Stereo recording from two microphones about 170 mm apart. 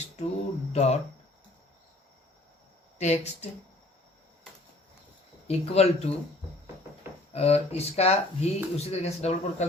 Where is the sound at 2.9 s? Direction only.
40° left (ahead or behind).